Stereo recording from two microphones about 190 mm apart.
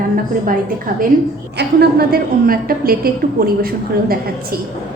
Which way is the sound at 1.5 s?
60° right (ahead or behind).